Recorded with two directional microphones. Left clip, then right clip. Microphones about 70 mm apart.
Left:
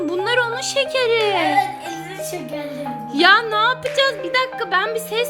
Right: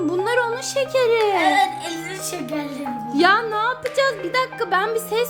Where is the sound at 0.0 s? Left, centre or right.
Centre.